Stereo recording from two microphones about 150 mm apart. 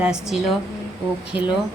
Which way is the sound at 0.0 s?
5° right (ahead or behind).